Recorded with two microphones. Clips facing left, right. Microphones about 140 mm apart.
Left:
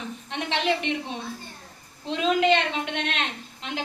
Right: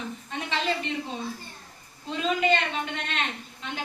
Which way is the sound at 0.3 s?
75° left (ahead or behind).